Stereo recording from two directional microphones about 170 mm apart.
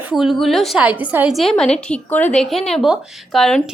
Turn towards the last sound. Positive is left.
turn(degrees=0)  # may be behind; listen again after turning